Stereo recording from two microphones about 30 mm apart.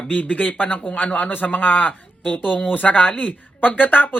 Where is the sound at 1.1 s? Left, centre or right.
Left.